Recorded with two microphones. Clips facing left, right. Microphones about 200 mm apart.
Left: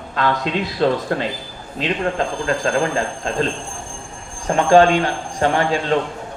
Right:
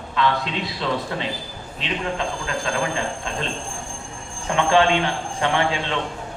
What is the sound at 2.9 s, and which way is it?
A man's voice, 40° left (ahead or behind).